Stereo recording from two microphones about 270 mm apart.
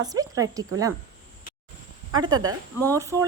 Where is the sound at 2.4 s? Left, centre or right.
Centre.